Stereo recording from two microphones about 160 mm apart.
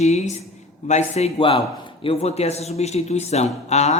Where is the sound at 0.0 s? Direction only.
45° left (ahead or behind).